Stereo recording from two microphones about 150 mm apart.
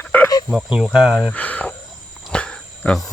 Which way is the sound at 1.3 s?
10° left (ahead or behind).